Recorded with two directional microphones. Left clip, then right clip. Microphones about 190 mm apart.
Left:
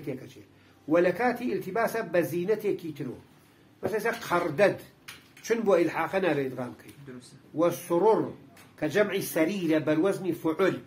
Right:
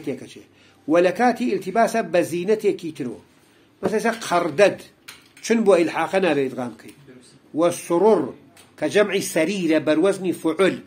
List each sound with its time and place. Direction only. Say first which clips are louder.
0.8 s speech: right 7 dB; 50° right (ahead or behind)